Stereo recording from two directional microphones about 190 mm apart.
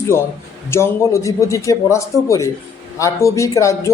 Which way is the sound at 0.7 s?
15° left (ahead or behind).